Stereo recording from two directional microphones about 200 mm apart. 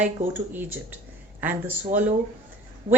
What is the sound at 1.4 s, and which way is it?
Speech, 10° right (ahead or behind).